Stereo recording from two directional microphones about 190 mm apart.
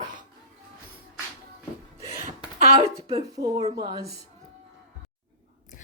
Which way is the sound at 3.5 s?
35° right (ahead or behind).